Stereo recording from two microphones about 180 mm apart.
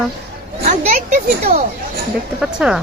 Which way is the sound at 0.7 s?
45° right (ahead or behind).